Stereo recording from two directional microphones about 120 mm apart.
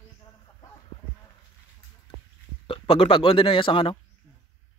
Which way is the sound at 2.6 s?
50° left (ahead or behind).